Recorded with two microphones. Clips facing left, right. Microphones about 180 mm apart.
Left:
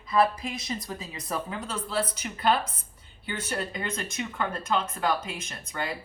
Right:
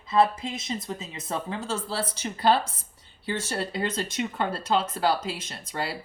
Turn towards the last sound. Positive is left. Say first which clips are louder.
# right 1 dB
turn(degrees=-30)  # may be behind; listen again after turning